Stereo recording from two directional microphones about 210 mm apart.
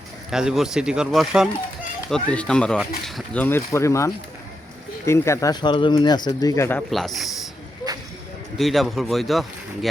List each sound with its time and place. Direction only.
0.3 s speech: 5° right (ahead or behind)
8.5 s speech: centre (ahead or behind)